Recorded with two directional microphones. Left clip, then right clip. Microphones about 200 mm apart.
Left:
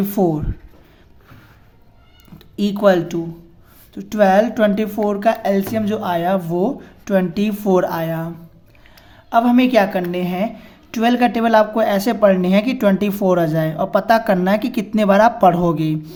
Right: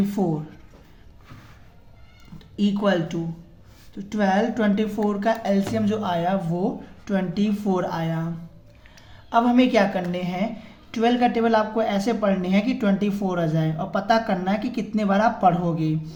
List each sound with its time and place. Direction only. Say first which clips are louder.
0.1 s a woman's voice: left 8 dB; 40° left (ahead or behind)
2.6 s a woman's voice: left 8 dB; 40° left (ahead or behind)
9.3 s a woman's voice: left 5 dB; 25° left (ahead or behind)